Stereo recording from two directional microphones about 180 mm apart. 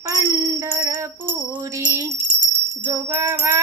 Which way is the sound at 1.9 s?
20° right (ahead or behind).